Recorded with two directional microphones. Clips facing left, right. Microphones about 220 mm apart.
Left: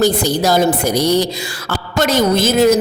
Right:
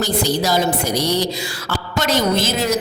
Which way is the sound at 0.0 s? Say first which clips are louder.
Left 5 dB; 50° left (ahead or behind).